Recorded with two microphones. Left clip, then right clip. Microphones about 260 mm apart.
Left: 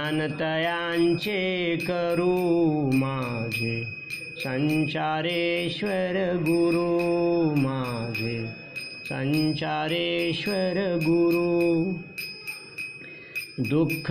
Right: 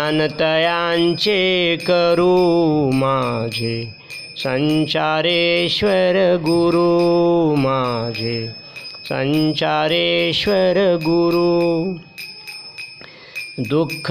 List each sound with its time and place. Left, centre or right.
0.0 s mantra: right
13.7 s mantra: right